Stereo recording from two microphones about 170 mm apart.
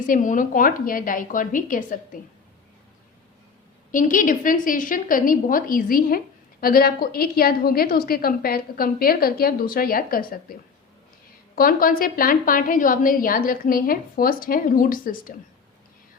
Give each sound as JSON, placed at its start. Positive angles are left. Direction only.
{"t": 0.1, "sound": "a woman's voice", "side_deg": 50}
{"t": 3.9, "sound": "a woman's voice", "side_deg": 50}
{"t": 11.5, "sound": "a woman's voice", "side_deg": 55}